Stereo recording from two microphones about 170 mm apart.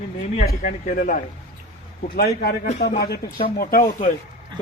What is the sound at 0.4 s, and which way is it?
Speech, 50° left (ahead or behind).